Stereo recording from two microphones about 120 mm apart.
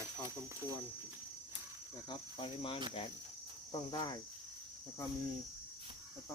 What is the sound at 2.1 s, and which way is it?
Insect, 45° left (ahead or behind).